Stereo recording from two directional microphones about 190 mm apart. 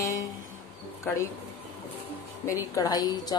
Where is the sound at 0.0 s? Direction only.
15° left (ahead or behind).